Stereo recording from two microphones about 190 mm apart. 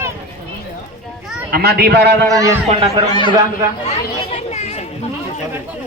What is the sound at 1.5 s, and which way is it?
Speech, 55° right (ahead or behind).